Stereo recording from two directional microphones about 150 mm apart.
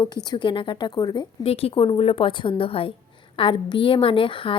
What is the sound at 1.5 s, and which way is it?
A woman's voice, 40° left (ahead or behind).